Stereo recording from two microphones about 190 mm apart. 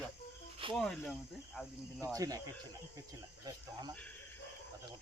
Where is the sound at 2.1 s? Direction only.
20° right (ahead or behind).